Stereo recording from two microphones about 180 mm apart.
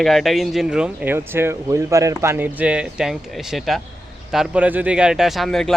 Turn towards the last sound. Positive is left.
turn(degrees=0)  # may be behind; listen again after turning